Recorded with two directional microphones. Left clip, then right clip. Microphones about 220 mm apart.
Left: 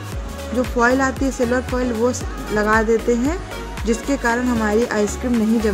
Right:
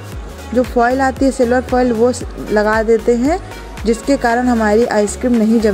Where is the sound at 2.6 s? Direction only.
20° right (ahead or behind).